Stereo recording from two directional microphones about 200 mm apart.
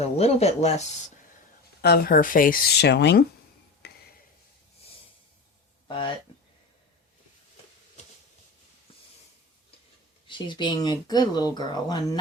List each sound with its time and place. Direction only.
0.0 s speech: 30° left (ahead or behind)
1.8 s speech: 50° left (ahead or behind)
3.8 s tick-tock: 55° left (ahead or behind)
10.2 s speech: 25° left (ahead or behind)